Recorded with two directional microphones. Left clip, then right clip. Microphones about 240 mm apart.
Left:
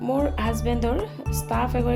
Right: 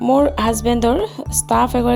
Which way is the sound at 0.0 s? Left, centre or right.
Right.